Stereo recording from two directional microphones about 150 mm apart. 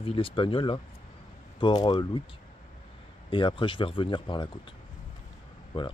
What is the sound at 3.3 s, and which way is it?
Speech, 35° left (ahead or behind).